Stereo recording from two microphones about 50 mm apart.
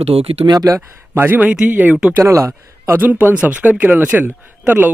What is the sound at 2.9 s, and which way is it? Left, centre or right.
Speech, right.